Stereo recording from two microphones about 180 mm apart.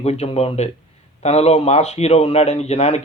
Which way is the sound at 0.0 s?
35° left (ahead or behind).